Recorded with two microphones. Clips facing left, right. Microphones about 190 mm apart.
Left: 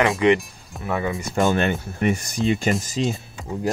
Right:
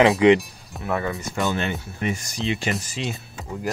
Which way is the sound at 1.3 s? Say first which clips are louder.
Left 6 dB; 50° left (ahead or behind).